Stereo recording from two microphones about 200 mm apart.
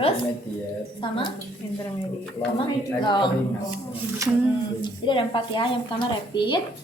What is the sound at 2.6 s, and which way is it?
Speech, 25° left (ahead or behind).